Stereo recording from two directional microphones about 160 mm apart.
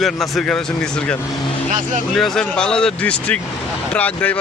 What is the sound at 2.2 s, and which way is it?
Speech, 5° left (ahead or behind).